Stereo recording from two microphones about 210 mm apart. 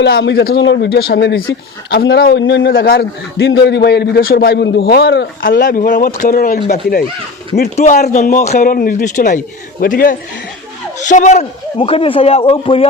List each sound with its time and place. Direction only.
0.0 s a man's voice: 55° left (ahead or behind)
7.8 s a man's voice: 35° left (ahead or behind)